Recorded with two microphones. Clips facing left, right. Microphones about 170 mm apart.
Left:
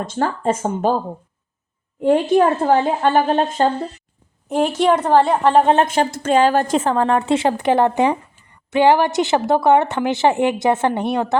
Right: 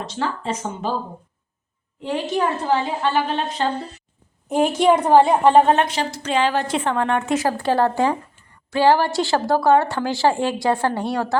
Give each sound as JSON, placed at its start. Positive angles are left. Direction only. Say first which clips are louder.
{"t": 0.0, "sound": "a woman's voice", "louder": "left 6 dB", "side_deg": 50}
{"t": 2.0, "sound": "a woman's voice", "louder": "left 8 dB", "side_deg": 50}
{"t": 4.4, "sound": "a woman's voice", "louder": "even", "side_deg": -5}
{"t": 5.7, "sound": "a woman's voice", "louder": "left 4 dB", "side_deg": 50}